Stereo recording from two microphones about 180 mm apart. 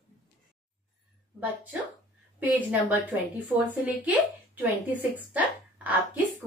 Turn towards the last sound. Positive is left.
turn(degrees=-10)  # may be behind; listen again after turning